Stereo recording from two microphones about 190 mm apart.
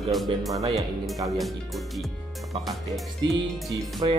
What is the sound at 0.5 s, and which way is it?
Speech, 15° right (ahead or behind).